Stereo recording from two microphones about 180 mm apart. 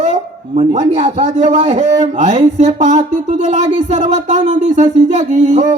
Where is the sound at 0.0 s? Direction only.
40° right (ahead or behind).